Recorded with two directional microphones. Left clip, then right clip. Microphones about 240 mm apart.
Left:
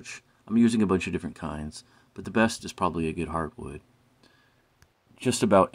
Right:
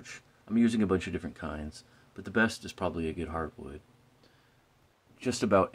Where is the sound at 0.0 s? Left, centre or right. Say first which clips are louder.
Left 5 dB; centre.